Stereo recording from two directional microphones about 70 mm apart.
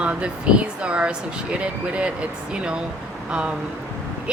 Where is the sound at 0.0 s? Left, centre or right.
Centre.